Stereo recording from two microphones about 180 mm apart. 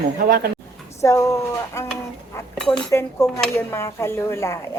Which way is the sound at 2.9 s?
15° left (ahead or behind).